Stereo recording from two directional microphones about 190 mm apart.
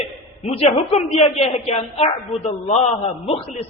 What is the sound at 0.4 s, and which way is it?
A woman's voice, 30° left (ahead or behind).